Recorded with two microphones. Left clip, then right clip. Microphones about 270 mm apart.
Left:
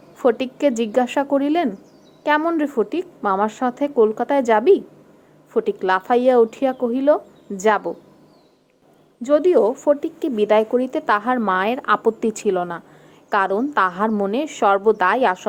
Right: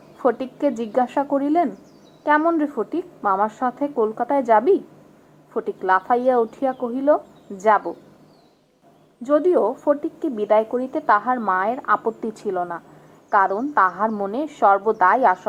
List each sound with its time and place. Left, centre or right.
0.2 s a woman's voice: left
9.2 s speech: left